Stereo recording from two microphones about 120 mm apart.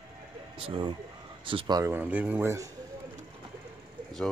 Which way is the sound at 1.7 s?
20° right (ahead or behind).